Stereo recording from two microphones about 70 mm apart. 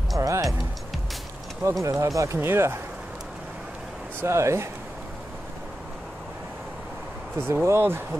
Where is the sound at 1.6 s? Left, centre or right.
Right.